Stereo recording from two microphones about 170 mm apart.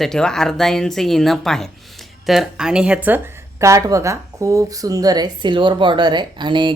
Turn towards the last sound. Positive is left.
turn(degrees=-25)  # may be behind; listen again after turning